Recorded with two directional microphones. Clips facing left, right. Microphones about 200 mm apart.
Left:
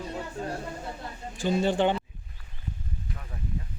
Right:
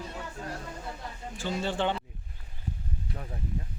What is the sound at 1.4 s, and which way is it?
Speech, 15° left (ahead or behind).